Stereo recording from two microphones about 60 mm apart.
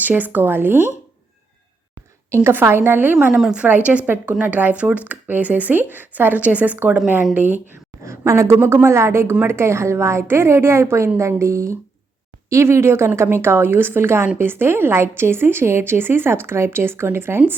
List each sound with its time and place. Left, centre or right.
0.0 s a woman's voice: right
2.5 s a woman's voice: right
3.3 s a woman's voice: centre
3.7 s a woman's voice: right
8.0 s a woman's voice: right